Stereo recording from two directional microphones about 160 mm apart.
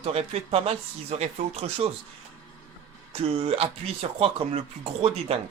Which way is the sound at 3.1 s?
40° right (ahead or behind).